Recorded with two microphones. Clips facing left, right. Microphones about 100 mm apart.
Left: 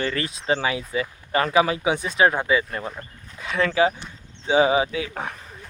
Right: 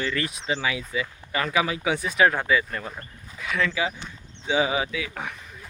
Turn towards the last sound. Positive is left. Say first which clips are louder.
# left 3 dB
turn(degrees=35)  # may be behind; listen again after turning